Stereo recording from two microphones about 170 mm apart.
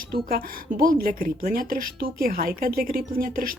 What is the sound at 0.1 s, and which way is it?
A woman's voice, 60° right (ahead or behind).